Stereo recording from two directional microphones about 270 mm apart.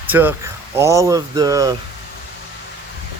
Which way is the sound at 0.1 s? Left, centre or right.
Centre.